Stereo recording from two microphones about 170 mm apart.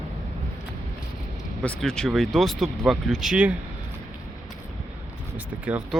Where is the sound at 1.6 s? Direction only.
5° left (ahead or behind).